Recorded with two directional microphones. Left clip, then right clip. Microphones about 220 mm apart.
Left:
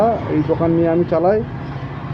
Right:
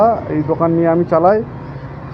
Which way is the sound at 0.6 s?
Centre (ahead or behind).